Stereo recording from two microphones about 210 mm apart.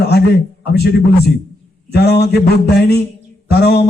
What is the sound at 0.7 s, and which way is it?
A man's voice, 50° left (ahead or behind).